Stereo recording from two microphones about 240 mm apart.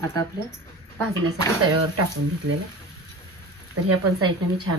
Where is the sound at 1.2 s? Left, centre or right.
Right.